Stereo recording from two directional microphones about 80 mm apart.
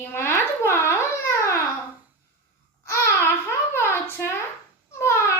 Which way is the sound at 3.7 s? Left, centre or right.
Left.